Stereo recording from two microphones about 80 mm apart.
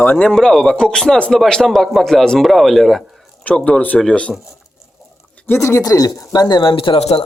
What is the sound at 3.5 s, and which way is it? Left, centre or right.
Speech, centre.